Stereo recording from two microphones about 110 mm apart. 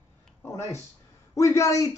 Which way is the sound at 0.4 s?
25° left (ahead or behind).